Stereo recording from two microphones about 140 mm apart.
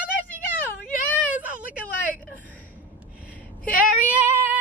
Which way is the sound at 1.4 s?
10° right (ahead or behind).